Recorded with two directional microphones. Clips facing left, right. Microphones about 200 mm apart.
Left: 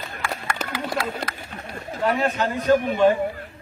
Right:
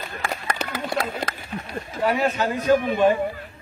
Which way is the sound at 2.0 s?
10° right (ahead or behind).